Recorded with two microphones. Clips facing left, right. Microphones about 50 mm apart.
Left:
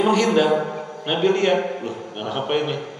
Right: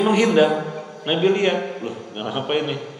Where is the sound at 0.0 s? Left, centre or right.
Centre.